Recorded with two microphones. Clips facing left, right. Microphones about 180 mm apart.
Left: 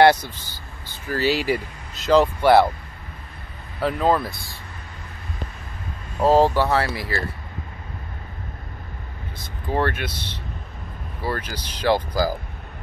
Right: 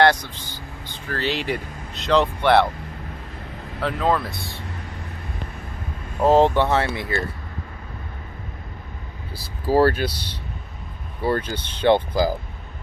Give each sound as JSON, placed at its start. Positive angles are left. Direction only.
{"t": 0.0, "sound": "speech", "side_deg": 10}
{"t": 3.8, "sound": "speech", "side_deg": 0}
{"t": 6.2, "sound": "speech", "side_deg": -20}
{"t": 9.4, "sound": "speech", "side_deg": -35}
{"t": 11.2, "sound": "speech", "side_deg": -30}